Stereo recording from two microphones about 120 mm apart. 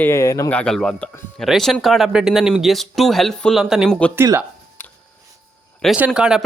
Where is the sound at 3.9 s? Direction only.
10° left (ahead or behind).